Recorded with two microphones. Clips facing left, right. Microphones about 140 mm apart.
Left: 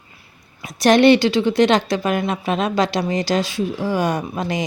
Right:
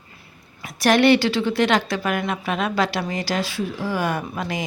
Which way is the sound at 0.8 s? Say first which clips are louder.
Left 4 dB; 20° left (ahead or behind).